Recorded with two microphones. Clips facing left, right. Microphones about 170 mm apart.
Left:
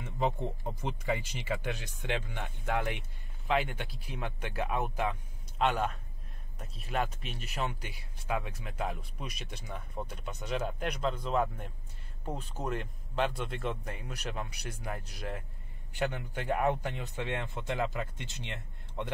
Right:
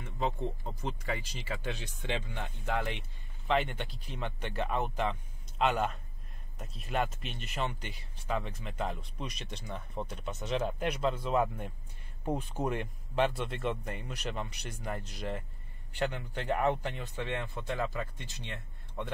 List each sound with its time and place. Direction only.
0.0 s speech: 15° left (ahead or behind)